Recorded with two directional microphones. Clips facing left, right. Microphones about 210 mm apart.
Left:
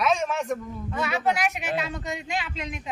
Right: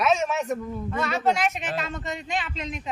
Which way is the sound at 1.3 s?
5° left (ahead or behind).